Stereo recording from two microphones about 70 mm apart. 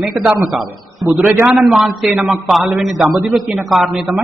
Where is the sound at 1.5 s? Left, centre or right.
Centre.